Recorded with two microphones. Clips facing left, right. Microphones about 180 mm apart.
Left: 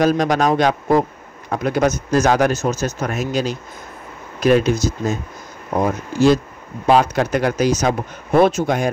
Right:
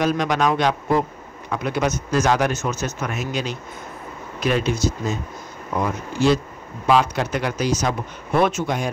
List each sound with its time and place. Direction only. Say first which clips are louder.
0.0 s speech: left 4 dB; 40° left (ahead or behind)
8.6 s speech: left 5 dB; 50° left (ahead or behind)